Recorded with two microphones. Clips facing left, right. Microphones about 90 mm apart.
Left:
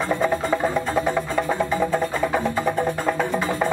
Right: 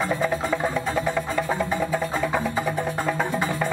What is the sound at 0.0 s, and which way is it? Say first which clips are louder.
Music: left 2 dB; centre (ahead or behind).